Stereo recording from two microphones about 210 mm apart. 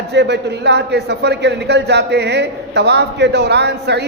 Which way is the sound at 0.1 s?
55° right (ahead or behind).